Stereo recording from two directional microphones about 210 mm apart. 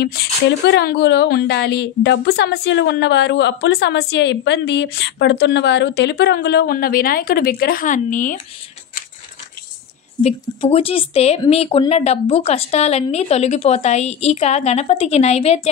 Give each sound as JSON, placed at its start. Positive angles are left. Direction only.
{"t": 0.0, "sound": "a woman's voice", "side_deg": 50}
{"t": 10.2, "sound": "speech", "side_deg": 30}